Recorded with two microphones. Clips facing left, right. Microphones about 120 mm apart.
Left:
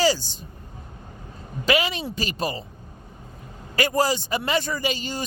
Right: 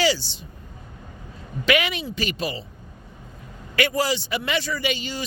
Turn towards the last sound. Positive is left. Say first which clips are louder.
# even
turn(degrees=45)  # may be behind; listen again after turning